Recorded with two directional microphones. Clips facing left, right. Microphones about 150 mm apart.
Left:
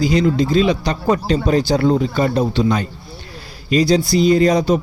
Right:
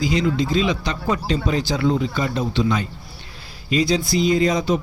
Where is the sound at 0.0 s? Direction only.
40° left (ahead or behind).